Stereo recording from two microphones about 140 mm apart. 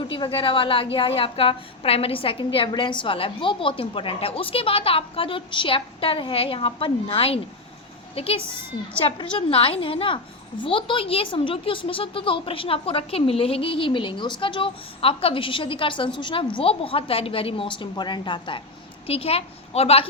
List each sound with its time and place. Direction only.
0.1 s a woman's voice: 40° left (ahead or behind)